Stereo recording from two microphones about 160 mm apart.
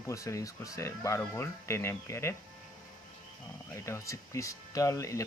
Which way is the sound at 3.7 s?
20° left (ahead or behind).